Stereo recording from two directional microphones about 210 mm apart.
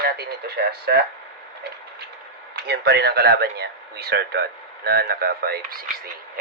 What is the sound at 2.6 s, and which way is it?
Speech, 50° right (ahead or behind).